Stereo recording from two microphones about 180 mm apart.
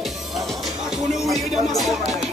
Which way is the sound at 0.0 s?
Centre (ahead or behind).